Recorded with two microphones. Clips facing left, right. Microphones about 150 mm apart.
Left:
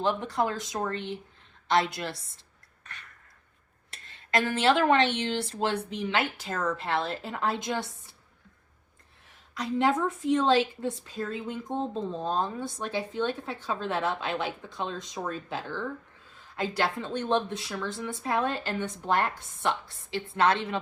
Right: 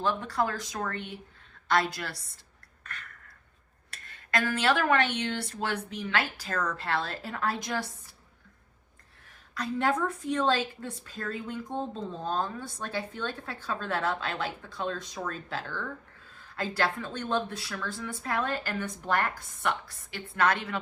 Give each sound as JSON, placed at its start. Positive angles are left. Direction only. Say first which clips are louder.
{"t": 0.0, "sound": "speech", "louder": "left 2 dB", "side_deg": 20}
{"t": 2.8, "sound": "a sound", "louder": "right 4 dB", "side_deg": 20}
{"t": 3.9, "sound": "speech", "louder": "left 3 dB", "side_deg": 20}
{"t": 9.6, "sound": "speech", "louder": "left 2 dB", "side_deg": 20}